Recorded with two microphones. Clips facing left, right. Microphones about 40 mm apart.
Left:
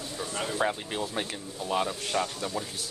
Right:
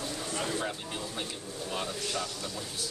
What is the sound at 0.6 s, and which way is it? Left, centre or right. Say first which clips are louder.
Speech: left 6 dB; left.